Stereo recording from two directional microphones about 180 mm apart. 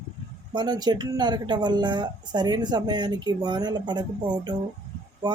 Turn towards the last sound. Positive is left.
turn(degrees=-20)  # may be behind; listen again after turning